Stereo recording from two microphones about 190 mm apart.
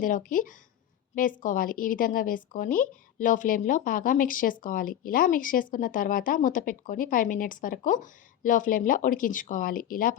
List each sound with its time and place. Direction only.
0.0 s a woman's voice: 45° left (ahead or behind)